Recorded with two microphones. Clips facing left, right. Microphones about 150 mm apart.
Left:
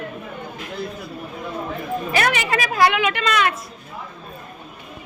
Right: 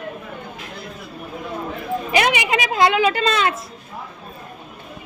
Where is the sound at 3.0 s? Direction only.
35° right (ahead or behind).